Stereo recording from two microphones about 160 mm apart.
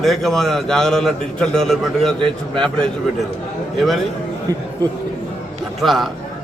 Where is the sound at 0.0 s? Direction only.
Centre (ahead or behind).